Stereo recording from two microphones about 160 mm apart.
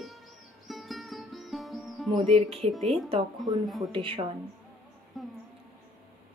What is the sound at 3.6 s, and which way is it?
Speech, centre (ahead or behind).